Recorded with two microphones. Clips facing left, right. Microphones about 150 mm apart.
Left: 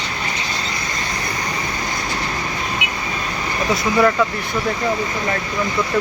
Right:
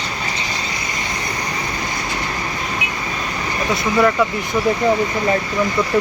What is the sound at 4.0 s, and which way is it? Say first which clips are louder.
Speech: right 1 dB; centre (ahead or behind).